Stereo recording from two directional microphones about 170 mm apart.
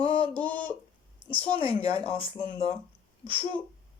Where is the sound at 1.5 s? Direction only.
30° left (ahead or behind).